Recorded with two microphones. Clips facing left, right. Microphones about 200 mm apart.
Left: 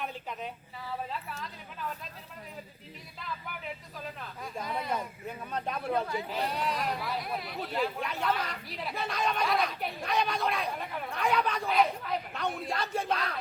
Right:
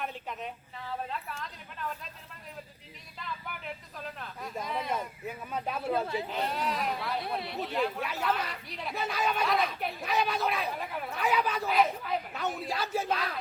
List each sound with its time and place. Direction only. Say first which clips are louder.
0.0 s speech: even; centre (ahead or behind)
3.2 s speech: even; centre (ahead or behind)
7.2 s speech: right 2 dB; 30° right (ahead or behind)
7.7 s speech: even; centre (ahead or behind)